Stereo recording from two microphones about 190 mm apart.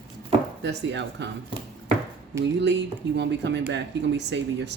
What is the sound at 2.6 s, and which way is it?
Speech, 65° right (ahead or behind).